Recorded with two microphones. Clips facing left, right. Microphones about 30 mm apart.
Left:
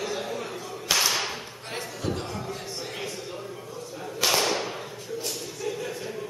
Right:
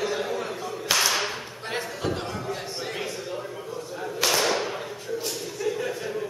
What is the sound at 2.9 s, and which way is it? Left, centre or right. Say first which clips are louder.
Whip: right 3 dB; centre.